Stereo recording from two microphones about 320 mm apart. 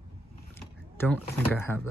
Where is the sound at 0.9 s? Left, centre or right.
Centre.